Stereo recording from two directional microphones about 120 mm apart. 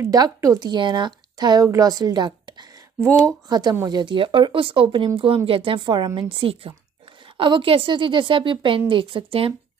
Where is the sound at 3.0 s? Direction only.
20° right (ahead or behind).